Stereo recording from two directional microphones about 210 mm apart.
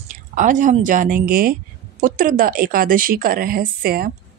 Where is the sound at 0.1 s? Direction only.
40° right (ahead or behind).